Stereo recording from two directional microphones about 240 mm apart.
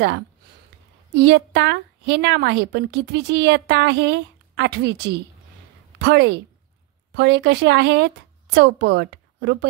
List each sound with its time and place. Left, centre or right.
1.1 s a woman's voice: right